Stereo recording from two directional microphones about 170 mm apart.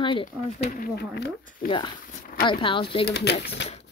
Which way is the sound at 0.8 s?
70° left (ahead or behind).